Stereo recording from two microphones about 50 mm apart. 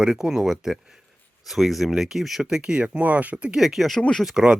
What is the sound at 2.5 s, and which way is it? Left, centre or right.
Speech, centre.